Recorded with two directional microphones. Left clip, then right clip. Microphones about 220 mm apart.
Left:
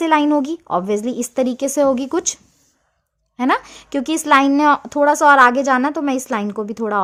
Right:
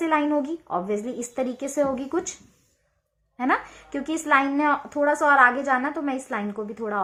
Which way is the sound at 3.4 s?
45° left (ahead or behind).